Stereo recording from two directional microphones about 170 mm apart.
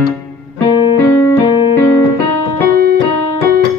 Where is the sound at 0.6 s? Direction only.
25° left (ahead or behind).